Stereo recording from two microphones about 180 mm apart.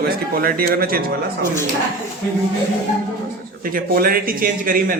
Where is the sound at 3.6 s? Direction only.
50° right (ahead or behind).